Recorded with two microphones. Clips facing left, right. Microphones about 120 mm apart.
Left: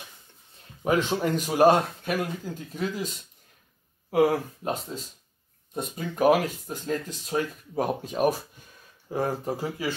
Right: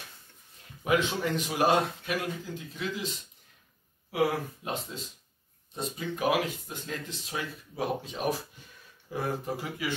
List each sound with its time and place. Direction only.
0.8 s speech: 40° left (ahead or behind)
4.6 s speech: 40° left (ahead or behind)